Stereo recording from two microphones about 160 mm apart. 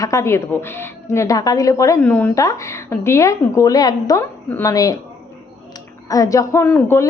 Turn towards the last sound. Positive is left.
turn(degrees=10)  # may be behind; listen again after turning